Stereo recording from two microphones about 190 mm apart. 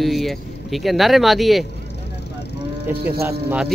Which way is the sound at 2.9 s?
10° right (ahead or behind).